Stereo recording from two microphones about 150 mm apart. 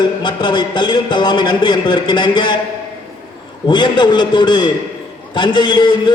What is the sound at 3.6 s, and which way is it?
A man's voice, 30° left (ahead or behind).